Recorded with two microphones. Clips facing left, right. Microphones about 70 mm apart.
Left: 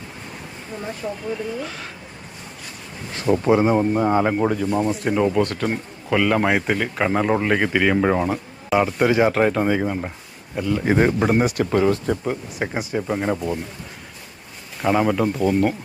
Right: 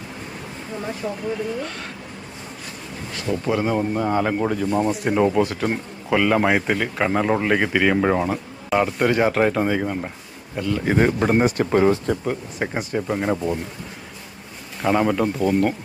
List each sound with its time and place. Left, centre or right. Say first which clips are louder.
0.8 s speech: right 1 dB; centre
3.2 s speech: left 6 dB; left; by 11.3 s centre
11.7 s speech: right 2 dB; centre
12.0 s speech: even; centre
14.8 s speech: even; centre